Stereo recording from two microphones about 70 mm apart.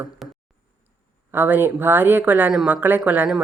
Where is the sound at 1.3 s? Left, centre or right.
Right.